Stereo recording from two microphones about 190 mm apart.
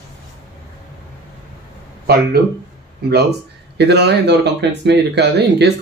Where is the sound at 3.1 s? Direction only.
60° right (ahead or behind).